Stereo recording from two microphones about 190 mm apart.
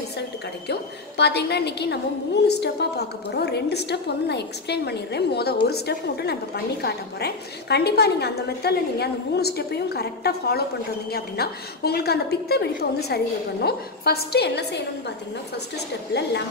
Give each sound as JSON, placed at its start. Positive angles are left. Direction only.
{"t": 0.7, "sound": "a woman's voice", "side_deg": 60}